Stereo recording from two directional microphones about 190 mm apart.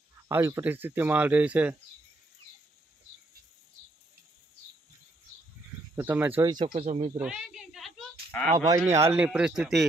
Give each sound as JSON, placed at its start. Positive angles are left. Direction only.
{"t": 0.3, "sound": "speech", "side_deg": -15}
{"t": 6.0, "sound": "speech", "side_deg": -10}
{"t": 6.7, "sound": "speech", "side_deg": -30}
{"t": 7.2, "sound": "a sound", "side_deg": -5}
{"t": 8.5, "sound": "speech", "side_deg": -20}